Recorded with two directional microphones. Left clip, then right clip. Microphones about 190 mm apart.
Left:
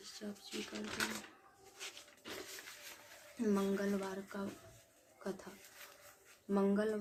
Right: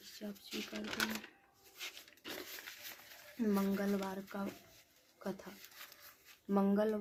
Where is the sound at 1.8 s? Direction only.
40° right (ahead or behind).